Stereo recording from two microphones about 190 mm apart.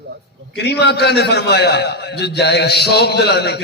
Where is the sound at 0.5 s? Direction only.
60° left (ahead or behind).